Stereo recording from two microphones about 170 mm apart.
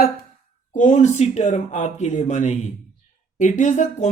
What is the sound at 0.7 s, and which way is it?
Speech, 45° left (ahead or behind).